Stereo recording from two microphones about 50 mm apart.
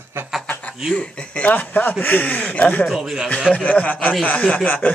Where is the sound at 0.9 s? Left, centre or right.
Left.